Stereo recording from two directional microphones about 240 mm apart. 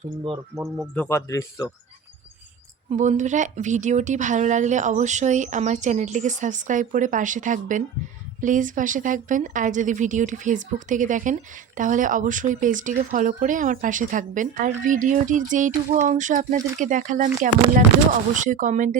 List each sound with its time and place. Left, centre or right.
0.3 s speech: centre
0.8 s speech: centre
2.9 s speech: right